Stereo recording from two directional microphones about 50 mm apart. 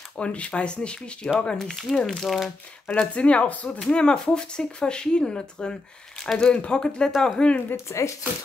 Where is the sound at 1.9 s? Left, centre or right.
Centre.